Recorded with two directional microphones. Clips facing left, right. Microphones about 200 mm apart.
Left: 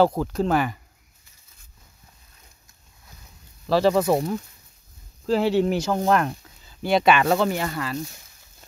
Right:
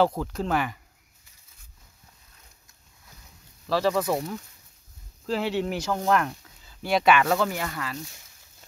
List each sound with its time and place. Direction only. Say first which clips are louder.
0.2 s speech: left 5 dB; 40° left (ahead or behind)
3.6 s speech: left 5 dB; 30° left (ahead or behind)
6.8 s speech: left 2 dB; 25° left (ahead or behind)